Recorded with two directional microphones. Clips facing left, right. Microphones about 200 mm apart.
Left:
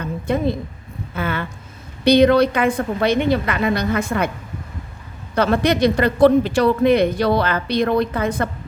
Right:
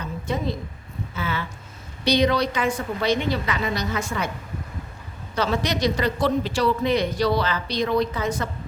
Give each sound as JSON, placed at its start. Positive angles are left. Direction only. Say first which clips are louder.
{"t": 0.0, "sound": "a sound", "louder": "left 7 dB", "side_deg": 55}
{"t": 1.1, "sound": "speech", "louder": "left 5 dB", "side_deg": 55}
{"t": 5.3, "sound": "speech", "louder": "left 7 dB", "side_deg": 55}